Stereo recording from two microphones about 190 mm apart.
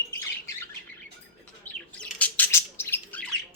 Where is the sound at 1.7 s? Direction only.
10° left (ahead or behind).